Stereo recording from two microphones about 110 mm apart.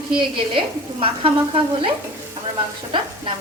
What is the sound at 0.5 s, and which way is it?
Frying, 55° right (ahead or behind).